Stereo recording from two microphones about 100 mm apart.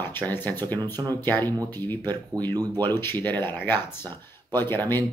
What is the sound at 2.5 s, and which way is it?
Speech, 40° right (ahead or behind).